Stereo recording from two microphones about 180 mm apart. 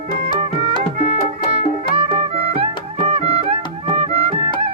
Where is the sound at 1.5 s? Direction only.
30° right (ahead or behind).